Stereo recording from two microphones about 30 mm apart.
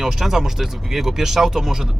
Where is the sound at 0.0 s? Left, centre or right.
Centre.